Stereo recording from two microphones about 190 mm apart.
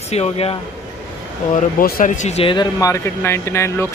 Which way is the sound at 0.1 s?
35° left (ahead or behind).